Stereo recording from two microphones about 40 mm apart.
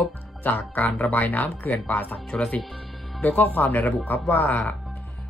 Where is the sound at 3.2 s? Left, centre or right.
Left.